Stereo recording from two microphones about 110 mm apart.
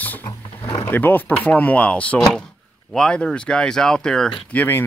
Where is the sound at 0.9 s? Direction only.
20° left (ahead or behind).